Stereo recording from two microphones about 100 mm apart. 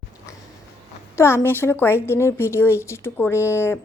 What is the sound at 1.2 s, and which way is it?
Speech, 25° left (ahead or behind).